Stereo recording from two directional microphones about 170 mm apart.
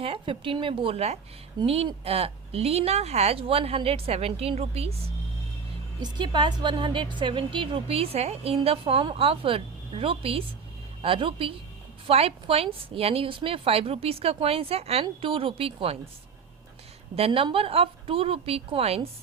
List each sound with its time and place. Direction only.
0.0 s a woman's voice: 30° right (ahead or behind)
6.0 s a woman's voice: 25° right (ahead or behind)
17.2 s a woman's voice: 35° right (ahead or behind)